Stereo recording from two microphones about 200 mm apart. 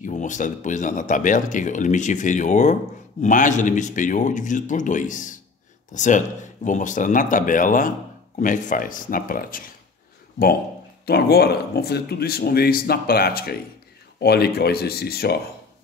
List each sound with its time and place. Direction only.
0.0 s speech: 40° left (ahead or behind)
11.1 s speech: 50° left (ahead or behind)